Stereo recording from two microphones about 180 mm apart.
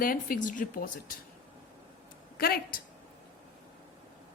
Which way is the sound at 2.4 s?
55° left (ahead or behind).